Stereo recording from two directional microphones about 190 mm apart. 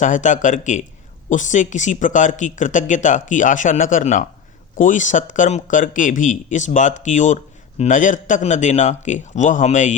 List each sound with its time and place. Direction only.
0.0 s speech: 40° left (ahead or behind)